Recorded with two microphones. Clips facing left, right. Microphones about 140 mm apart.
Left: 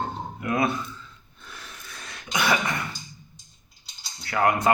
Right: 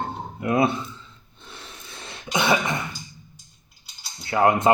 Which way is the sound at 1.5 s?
25° right (ahead or behind).